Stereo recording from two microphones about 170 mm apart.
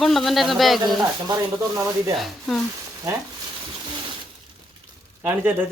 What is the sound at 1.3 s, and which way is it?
Speech, 20° right (ahead or behind).